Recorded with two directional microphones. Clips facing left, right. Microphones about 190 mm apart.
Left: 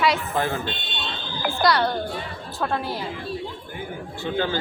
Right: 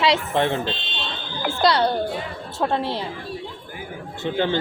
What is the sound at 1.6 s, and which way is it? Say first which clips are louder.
A woman's voice: right 2 dB; 25° right (ahead or behind).